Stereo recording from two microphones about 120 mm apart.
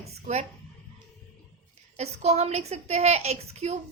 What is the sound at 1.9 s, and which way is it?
A woman's voice, 65° right (ahead or behind).